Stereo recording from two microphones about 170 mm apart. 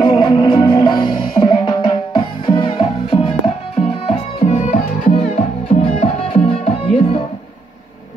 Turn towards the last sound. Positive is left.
turn(degrees=30)  # may be behind; listen again after turning